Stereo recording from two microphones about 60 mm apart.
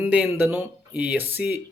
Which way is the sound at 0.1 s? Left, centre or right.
Right.